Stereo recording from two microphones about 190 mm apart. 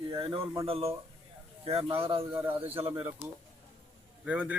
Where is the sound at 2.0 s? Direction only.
30° right (ahead or behind).